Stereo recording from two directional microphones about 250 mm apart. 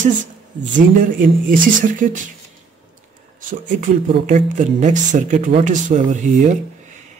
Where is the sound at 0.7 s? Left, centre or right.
Right.